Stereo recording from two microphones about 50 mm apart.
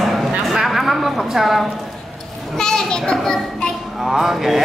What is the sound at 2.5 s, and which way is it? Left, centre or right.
A child's voice, centre.